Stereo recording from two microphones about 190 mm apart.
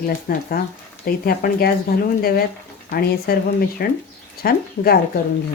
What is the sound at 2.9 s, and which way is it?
Speech, 55° left (ahead or behind).